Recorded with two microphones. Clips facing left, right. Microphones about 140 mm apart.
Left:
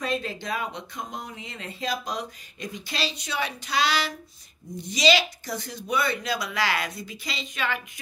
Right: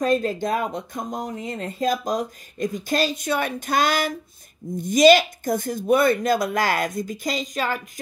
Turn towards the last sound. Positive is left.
turn(degrees=-40)  # may be behind; listen again after turning